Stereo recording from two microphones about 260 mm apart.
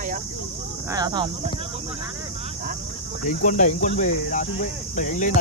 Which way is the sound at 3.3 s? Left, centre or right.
Left.